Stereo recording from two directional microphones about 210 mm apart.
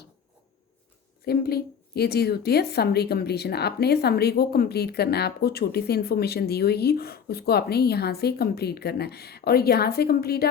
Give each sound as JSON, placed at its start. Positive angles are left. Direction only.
{"t": 1.2, "sound": "a woman's voice", "side_deg": 50}